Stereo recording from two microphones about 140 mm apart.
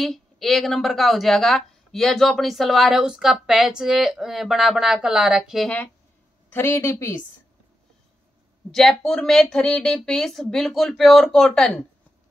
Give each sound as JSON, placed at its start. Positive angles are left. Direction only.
{"t": 0.0, "sound": "a woman's voice", "side_deg": 0}
{"t": 6.5, "sound": "speech", "side_deg": 20}
{"t": 8.7, "sound": "a woman's voice", "side_deg": 5}